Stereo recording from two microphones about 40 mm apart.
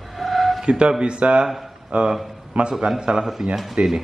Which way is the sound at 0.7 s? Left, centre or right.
Right.